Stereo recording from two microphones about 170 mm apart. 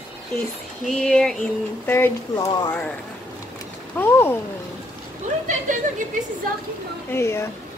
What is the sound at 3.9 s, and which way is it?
Speech, 10° left (ahead or behind).